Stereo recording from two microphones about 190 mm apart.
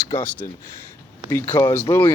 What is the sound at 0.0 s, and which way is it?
Speech, 20° left (ahead or behind).